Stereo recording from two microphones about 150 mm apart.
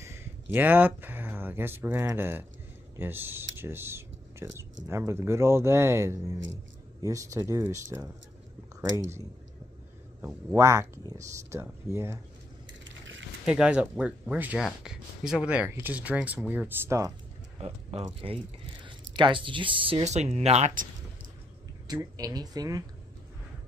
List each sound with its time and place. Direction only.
0.0 s speech: 15° right (ahead or behind)
10.2 s speech: 20° right (ahead or behind)
13.5 s speech: 5° right (ahead or behind)
17.6 s speech: 45° right (ahead or behind)
21.9 s speech: 25° right (ahead or behind)